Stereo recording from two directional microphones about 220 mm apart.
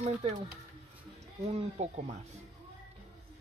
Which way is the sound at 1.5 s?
30° right (ahead or behind).